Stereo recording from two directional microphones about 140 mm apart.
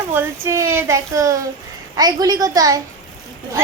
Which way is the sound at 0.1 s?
15° right (ahead or behind).